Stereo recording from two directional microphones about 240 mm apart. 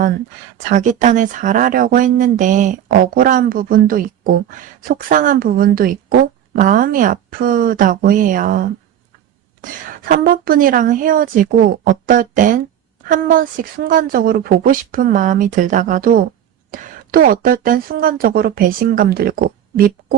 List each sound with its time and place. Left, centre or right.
0.7 s speech: right